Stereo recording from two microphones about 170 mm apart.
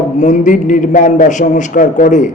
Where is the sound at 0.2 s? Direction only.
45° left (ahead or behind).